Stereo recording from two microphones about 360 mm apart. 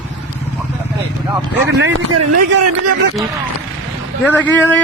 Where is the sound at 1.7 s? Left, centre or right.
Right.